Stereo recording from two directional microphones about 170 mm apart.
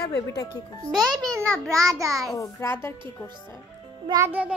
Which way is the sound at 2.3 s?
15° left (ahead or behind).